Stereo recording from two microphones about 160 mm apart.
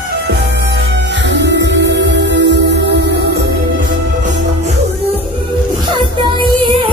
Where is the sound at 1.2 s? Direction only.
90° right.